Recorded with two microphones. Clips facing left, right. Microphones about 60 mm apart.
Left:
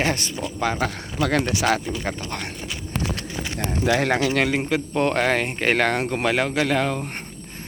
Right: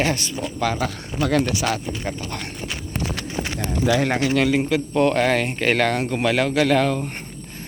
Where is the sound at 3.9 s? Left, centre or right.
Left.